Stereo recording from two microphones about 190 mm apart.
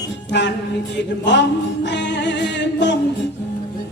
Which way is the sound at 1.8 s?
65° left (ahead or behind).